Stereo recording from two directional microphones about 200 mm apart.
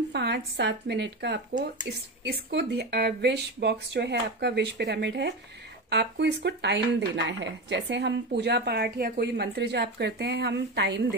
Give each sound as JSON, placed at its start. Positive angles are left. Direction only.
{"t": 0.1, "sound": "speech", "side_deg": -60}